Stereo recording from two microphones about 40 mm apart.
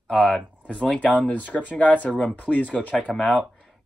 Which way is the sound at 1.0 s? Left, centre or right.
Left.